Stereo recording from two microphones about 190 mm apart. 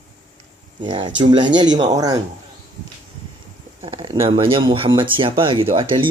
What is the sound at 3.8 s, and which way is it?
Speech, 30° right (ahead or behind).